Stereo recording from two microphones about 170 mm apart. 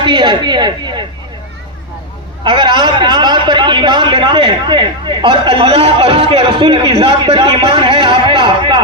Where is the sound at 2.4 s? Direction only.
30° right (ahead or behind).